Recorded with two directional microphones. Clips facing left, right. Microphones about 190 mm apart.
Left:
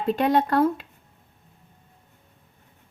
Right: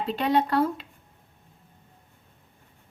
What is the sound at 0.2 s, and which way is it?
Speech, 50° left (ahead or behind).